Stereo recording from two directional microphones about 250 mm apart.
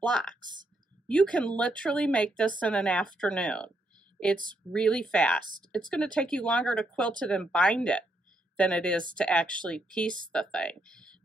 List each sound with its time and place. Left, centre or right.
0.0 s a woman's voice: centre